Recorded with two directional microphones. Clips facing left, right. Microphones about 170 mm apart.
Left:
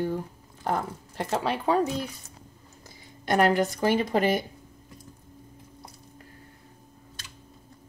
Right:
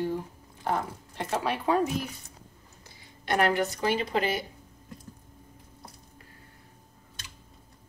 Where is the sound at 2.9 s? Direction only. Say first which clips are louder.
Left 3 dB; 40° left (ahead or behind).